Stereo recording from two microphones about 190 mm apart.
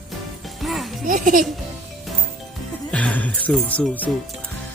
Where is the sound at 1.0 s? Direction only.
45° right (ahead or behind).